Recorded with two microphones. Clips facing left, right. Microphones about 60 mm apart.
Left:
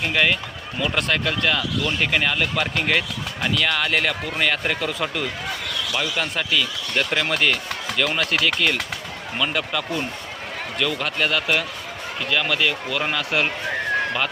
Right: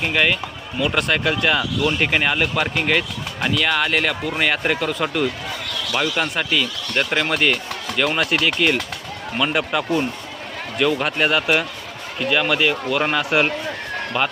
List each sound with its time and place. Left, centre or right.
0.1 s speech: centre
1.2 s speech: centre
4.4 s speech: centre